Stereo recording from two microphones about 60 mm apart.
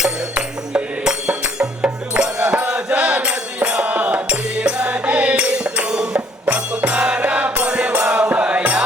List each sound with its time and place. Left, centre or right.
1.0 s music: centre
6.1 s music: right